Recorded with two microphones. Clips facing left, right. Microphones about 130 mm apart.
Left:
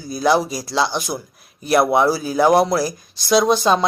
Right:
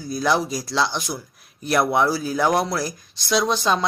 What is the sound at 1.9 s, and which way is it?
Speech, 10° left (ahead or behind).